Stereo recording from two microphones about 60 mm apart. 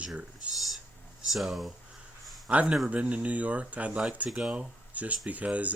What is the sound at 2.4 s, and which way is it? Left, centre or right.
Speech, centre.